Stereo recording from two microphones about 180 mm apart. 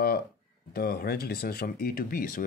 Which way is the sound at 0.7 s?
55° left (ahead or behind).